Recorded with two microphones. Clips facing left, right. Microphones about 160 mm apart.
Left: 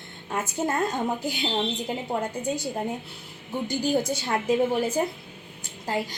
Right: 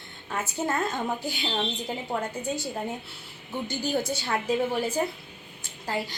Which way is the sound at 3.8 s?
20° left (ahead or behind).